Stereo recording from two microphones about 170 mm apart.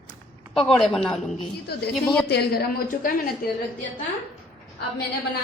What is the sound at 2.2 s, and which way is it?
Speech, 70° left (ahead or behind).